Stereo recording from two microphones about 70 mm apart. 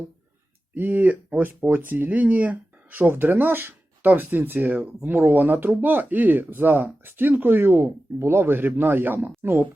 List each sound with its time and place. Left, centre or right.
0.7 s a woman's voice: right